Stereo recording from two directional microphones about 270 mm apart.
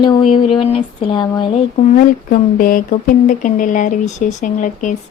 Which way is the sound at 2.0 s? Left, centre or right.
Left.